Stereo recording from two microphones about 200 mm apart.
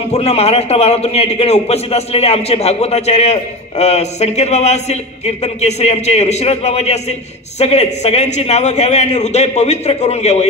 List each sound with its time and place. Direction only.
0.1 s a man's voice: 30° left (ahead or behind)